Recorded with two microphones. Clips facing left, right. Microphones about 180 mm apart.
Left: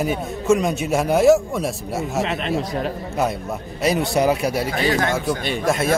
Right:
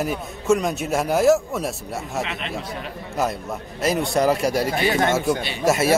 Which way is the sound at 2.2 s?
40° left (ahead or behind).